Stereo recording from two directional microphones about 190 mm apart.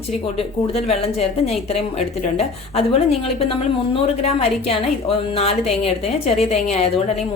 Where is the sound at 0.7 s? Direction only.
30° left (ahead or behind).